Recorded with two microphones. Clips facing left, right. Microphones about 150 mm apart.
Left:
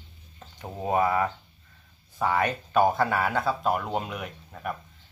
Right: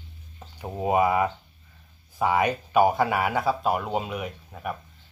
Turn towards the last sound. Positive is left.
turn(degrees=-5)  # may be behind; listen again after turning